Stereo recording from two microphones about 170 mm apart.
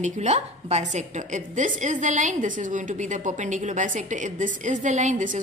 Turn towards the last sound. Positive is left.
turn(degrees=-45)  # may be behind; listen again after turning